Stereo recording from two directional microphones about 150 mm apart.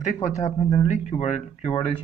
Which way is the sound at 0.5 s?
50° left (ahead or behind).